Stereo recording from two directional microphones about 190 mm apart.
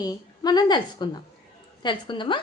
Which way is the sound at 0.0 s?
20° left (ahead or behind).